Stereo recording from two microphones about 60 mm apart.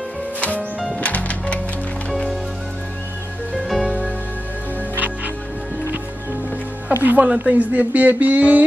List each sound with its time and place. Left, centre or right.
0.4 s music: left
2.0 s music: centre
3.5 s music: centre
4.9 s music: right
7.0 s speech: right